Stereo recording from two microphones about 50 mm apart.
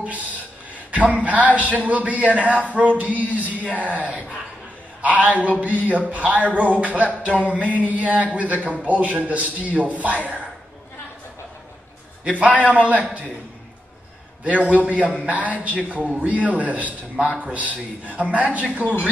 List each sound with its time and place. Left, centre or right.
0.9 s a man's voice: right
12.3 s a man's voice: right
14.4 s a man's voice: right